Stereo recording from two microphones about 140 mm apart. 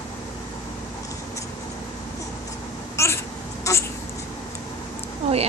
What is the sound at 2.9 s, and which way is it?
Cat, 20° left (ahead or behind).